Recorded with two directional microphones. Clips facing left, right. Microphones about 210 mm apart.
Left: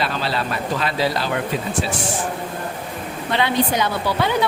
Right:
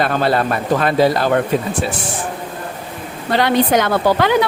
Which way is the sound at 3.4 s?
80° right.